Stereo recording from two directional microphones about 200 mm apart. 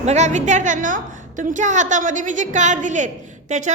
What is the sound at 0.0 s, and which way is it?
A man's voice, 35° right (ahead or behind).